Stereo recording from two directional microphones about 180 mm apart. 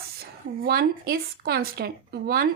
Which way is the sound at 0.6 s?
55° right (ahead or behind).